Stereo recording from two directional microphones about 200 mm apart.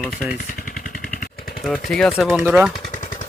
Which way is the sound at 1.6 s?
Centre (ahead or behind).